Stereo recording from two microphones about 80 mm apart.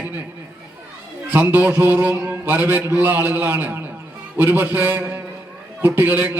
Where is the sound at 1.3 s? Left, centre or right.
Right.